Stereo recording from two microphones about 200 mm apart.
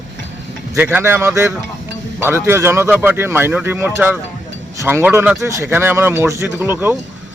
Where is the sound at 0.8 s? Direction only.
10° right (ahead or behind).